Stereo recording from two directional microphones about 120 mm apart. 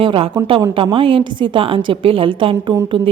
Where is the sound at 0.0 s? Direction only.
50° right (ahead or behind).